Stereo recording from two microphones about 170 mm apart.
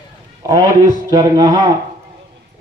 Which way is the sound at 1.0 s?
20° right (ahead or behind).